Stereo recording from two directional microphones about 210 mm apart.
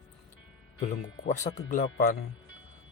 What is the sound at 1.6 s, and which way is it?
Speech, 35° left (ahead or behind).